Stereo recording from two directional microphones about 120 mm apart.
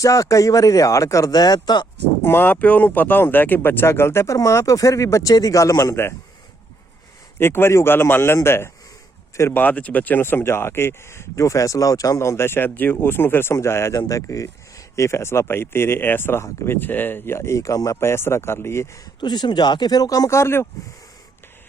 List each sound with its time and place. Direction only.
0.0 s speech: 25° left (ahead or behind)
2.2 s speech: 15° left (ahead or behind)
7.3 s speech: 20° left (ahead or behind)
19.2 s speech: 35° left (ahead or behind); by 20.7 s 20° left (ahead or behind)